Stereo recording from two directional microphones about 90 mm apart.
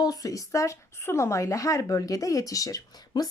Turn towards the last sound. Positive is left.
turn(degrees=45)  # may be behind; listen again after turning